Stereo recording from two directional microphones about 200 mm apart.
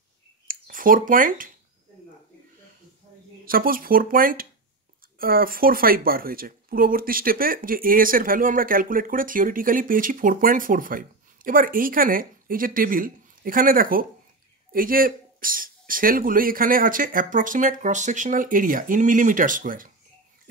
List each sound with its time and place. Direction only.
0.5 s speech: 45° right (ahead or behind)
3.4 s speech: 45° right (ahead or behind)